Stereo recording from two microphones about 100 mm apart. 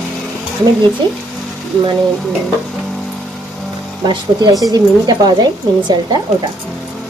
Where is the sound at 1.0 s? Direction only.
50° right (ahead or behind).